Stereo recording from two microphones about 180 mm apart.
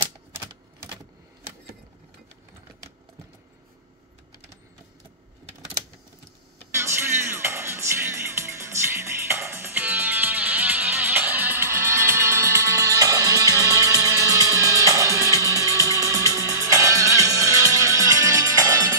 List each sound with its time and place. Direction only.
6.7 s music: 15° right (ahead or behind)